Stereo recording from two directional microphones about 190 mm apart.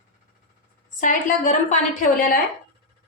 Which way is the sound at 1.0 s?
40° left (ahead or behind).